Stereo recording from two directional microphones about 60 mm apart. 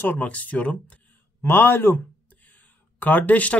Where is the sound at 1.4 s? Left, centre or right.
Left.